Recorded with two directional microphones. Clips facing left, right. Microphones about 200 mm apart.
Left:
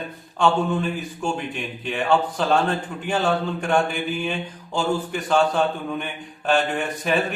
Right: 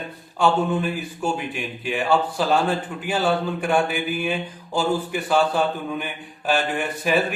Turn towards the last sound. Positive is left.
turn(degrees=-5)  # may be behind; listen again after turning